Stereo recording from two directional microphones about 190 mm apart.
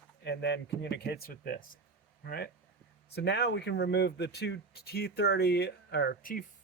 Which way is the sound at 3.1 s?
60° left (ahead or behind).